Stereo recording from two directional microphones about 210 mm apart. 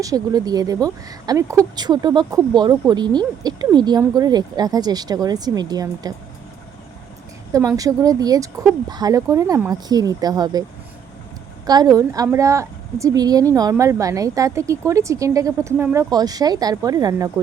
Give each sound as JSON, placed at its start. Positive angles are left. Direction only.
{"t": 0.0, "sound": "speech", "side_deg": -15}
{"t": 7.5, "sound": "a woman's voice", "side_deg": -15}
{"t": 11.6, "sound": "a woman's voice", "side_deg": -20}